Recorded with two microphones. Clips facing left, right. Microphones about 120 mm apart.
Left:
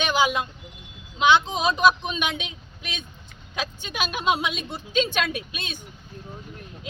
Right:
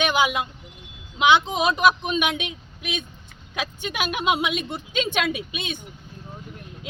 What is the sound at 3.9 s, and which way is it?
A woman's voice, 10° right (ahead or behind).